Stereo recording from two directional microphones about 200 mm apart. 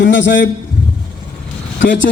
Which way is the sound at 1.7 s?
65° left (ahead or behind).